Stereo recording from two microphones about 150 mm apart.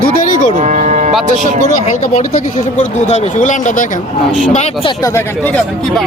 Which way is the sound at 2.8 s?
50° left (ahead or behind).